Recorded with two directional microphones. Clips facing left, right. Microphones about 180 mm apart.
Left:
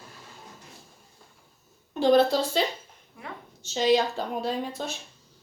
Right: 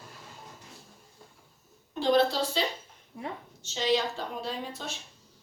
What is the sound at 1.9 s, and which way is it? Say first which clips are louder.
Speech: left 4 dB; 50° left (ahead or behind).